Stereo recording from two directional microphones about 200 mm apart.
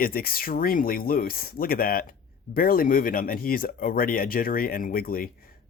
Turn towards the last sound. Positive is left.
turn(degrees=50)  # may be behind; listen again after turning